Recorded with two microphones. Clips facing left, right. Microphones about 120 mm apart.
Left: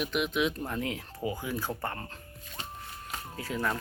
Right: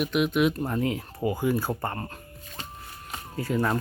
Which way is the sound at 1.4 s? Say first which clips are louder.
Right 7 dB; 10° right (ahead or behind).